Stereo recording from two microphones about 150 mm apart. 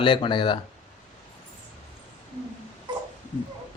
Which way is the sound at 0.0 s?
35° left (ahead or behind).